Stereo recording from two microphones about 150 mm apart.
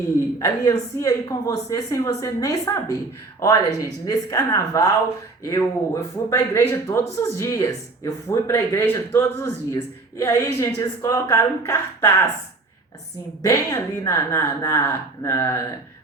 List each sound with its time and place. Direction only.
0.2 s speech: 25° left (ahead or behind)
13.4 s speech: 20° left (ahead or behind)